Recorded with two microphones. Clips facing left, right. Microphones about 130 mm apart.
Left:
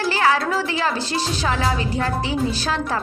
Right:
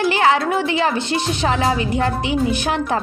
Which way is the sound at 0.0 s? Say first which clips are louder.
Right 3 dB; 20° right (ahead or behind).